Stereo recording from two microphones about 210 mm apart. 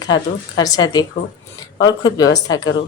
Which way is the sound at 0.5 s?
20° left (ahead or behind).